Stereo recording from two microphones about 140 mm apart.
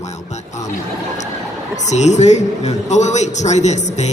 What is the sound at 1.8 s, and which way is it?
Speech, 55° left (ahead or behind).